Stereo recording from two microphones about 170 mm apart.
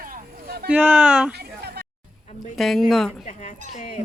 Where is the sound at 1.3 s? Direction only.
75° right (ahead or behind).